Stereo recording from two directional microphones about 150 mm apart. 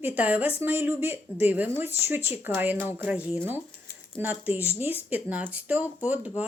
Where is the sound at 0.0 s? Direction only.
10° right (ahead or behind).